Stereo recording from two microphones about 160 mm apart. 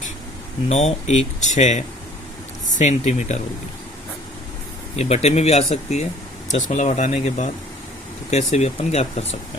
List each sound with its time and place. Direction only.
0.7 s speech: 45° left (ahead or behind)
4.9 s speech: 40° left (ahead or behind)